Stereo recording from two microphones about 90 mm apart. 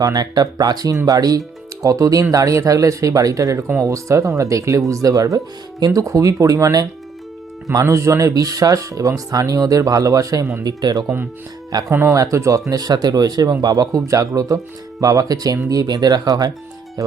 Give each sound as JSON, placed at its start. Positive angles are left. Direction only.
{"t": 0.0, "sound": "speech", "side_deg": -45}
{"t": 11.9, "sound": "speech", "side_deg": -25}
{"t": 12.1, "sound": "speech", "side_deg": -35}